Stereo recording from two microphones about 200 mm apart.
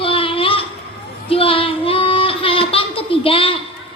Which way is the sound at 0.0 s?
25° left (ahead or behind).